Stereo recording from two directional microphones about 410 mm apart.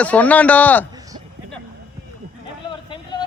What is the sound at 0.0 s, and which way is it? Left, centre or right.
Speech, centre.